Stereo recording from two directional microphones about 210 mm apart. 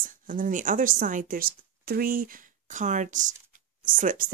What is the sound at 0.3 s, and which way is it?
Speech, 40° right (ahead or behind).